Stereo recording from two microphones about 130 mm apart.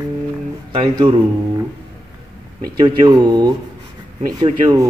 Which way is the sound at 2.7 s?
35° right (ahead or behind).